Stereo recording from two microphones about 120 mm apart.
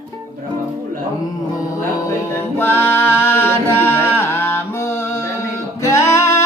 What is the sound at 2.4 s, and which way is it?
A capella, 20° left (ahead or behind).